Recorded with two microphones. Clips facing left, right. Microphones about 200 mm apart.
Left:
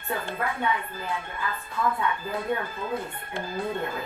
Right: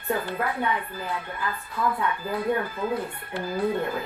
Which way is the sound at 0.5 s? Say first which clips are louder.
Right 1 dB; 25° left (ahead or behind).